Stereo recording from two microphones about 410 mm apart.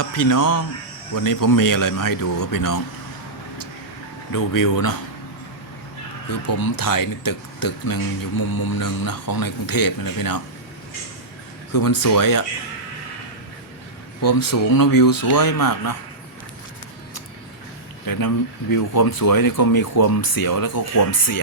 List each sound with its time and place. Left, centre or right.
0.0 s speech: left
4.3 s speech: left
6.2 s speech: left
11.7 s speech: left
14.2 s speech: left
18.0 s speech: left